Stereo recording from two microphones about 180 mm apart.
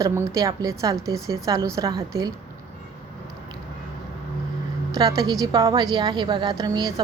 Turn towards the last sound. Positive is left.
turn(degrees=-20)  # may be behind; listen again after turning